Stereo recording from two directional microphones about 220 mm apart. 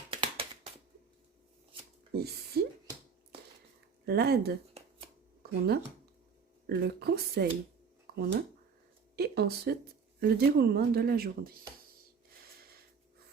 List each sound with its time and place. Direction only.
0.1 s a sound: 25° right (ahead or behind)
2.1 s speech: 45° right (ahead or behind)
4.0 s speech: 45° right (ahead or behind)